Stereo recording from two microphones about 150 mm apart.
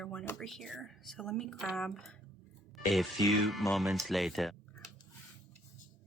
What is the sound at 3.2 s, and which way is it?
Speech, centre (ahead or behind).